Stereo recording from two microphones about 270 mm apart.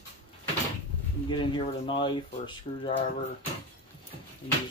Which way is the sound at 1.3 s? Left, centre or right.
Centre.